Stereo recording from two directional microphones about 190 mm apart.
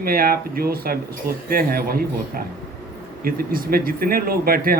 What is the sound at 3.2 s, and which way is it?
Speech, 50° right (ahead or behind).